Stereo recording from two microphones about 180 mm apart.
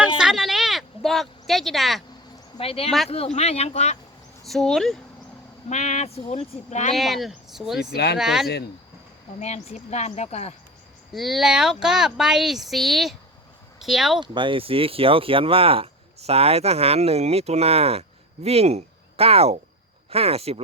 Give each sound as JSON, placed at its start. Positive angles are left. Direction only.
{"t": 0.2, "sound": "a sound", "side_deg": 0}
{"t": 2.6, "sound": "speech", "side_deg": 35}
{"t": 4.4, "sound": "speech", "side_deg": 0}
{"t": 5.6, "sound": "speech", "side_deg": 40}
{"t": 6.9, "sound": "speech", "side_deg": 0}
{"t": 7.9, "sound": "speech", "side_deg": 65}
{"t": 8.2, "sound": "speech", "side_deg": 0}
{"t": 9.4, "sound": "speech", "side_deg": 40}
{"t": 11.1, "sound": "speech", "side_deg": 0}
{"t": 14.2, "sound": "speech", "side_deg": -25}